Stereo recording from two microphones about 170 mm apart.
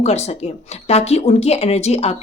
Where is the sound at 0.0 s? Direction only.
40° left (ahead or behind).